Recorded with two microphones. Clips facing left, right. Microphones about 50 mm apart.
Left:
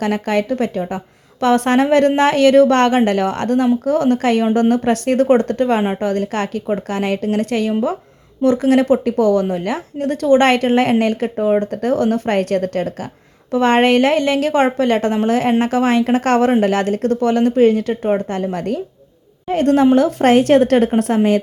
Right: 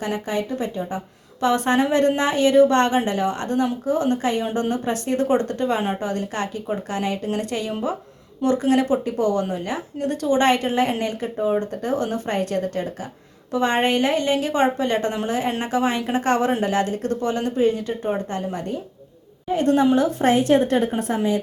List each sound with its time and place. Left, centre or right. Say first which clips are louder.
0.0 s a woman's voice: left 7 dB; left
0.8 s a woman's voice: left 5 dB; left
5.3 s a woman's voice: left 6 dB; left
9.1 s speech: left 8 dB; right
9.6 s a woman's voice: left 5 dB; left
14.5 s a woman's voice: left 5 dB; left
18.0 s a woman's voice: left 7 dB; left